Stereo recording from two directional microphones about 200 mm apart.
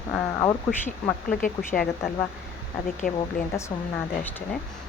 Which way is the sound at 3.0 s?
45° left (ahead or behind).